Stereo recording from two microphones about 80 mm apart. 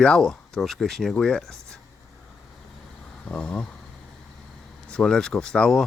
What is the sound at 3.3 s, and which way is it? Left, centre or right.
Speech, centre.